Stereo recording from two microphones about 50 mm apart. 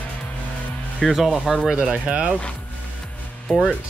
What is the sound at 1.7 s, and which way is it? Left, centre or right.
Speech, centre.